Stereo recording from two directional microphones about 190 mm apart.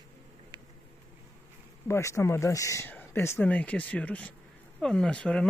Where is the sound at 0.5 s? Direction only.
20° right (ahead or behind).